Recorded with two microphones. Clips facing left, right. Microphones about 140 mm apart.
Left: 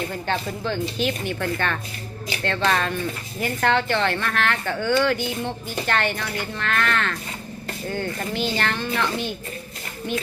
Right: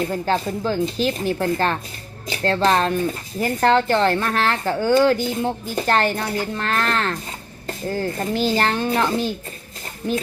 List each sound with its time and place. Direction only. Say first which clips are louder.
0.0 s a woman's voice: right 5 dB; 40° right (ahead or behind)